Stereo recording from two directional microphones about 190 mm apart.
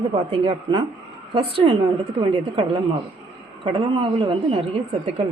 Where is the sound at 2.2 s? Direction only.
25° right (ahead or behind).